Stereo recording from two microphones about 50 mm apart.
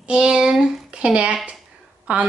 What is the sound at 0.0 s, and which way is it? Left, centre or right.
A child's voice, centre.